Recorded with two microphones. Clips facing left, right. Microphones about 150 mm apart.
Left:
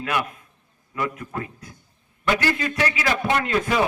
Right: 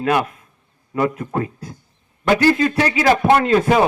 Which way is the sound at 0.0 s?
35° right (ahead or behind).